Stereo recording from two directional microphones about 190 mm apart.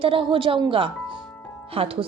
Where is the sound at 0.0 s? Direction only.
25° right (ahead or behind).